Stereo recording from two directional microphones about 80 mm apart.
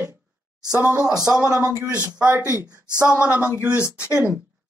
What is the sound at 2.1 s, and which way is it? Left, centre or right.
Speech, centre.